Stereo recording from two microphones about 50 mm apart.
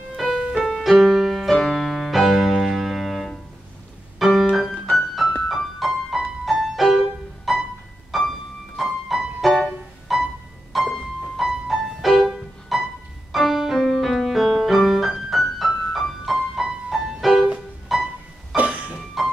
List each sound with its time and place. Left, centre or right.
0.1 s music: centre
0.6 s music: centre
0.9 s music: centre
4.2 s piano: centre
4.6 s music: centre
18.6 s music: right
19.2 s music: centre